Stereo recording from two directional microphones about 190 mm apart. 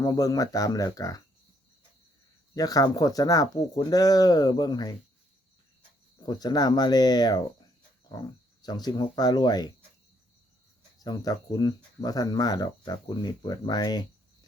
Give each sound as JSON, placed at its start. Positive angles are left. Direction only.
{"t": 0.0, "sound": "speech", "side_deg": 20}
{"t": 2.6, "sound": "speech", "side_deg": 20}
{"t": 6.2, "sound": "speech", "side_deg": 20}
{"t": 8.6, "sound": "speech", "side_deg": 20}
{"t": 11.0, "sound": "speech", "side_deg": 20}